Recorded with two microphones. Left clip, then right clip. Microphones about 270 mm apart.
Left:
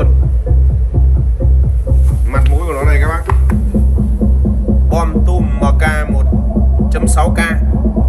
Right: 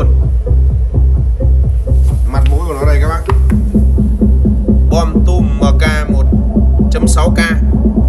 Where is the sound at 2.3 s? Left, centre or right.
Centre.